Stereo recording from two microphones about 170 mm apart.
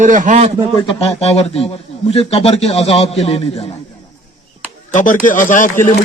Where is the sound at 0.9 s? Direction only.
35° left (ahead or behind).